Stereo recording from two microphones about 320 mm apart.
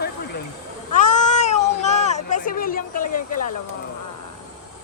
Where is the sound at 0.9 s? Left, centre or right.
Left.